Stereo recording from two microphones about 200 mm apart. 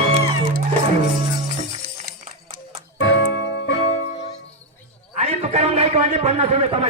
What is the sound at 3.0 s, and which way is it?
Music, 65° left (ahead or behind).